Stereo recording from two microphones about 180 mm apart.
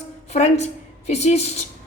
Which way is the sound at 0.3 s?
40° left (ahead or behind).